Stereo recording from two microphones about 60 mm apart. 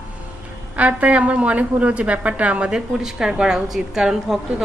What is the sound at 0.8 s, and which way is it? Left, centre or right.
A woman's voice, right.